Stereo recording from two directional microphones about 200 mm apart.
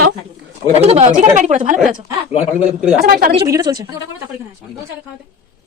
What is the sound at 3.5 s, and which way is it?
Speech, 20° right (ahead or behind).